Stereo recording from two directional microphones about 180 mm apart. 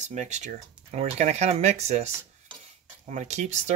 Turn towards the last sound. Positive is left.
turn(degrees=-40)  # may be behind; listen again after turning